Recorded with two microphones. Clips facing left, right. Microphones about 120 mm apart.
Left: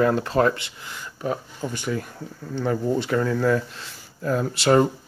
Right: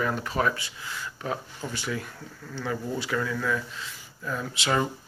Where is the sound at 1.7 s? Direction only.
45° left (ahead or behind).